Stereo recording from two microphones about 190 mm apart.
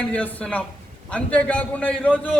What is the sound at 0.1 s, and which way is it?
A man's voice, 10° left (ahead or behind).